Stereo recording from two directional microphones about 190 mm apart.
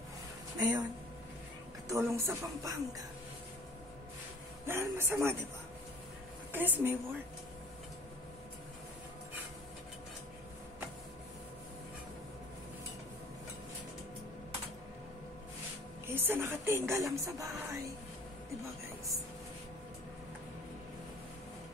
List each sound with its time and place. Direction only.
0.6 s speech: 20° right (ahead or behind)
1.9 s speech: 15° right (ahead or behind)
4.6 s speech: 15° right (ahead or behind)
6.5 s speech: 10° right (ahead or behind)
16.1 s speech: 10° right (ahead or behind)